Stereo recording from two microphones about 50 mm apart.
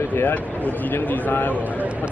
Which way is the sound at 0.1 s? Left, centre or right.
Left.